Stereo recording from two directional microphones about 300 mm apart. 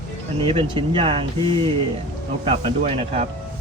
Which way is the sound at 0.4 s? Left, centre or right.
Centre.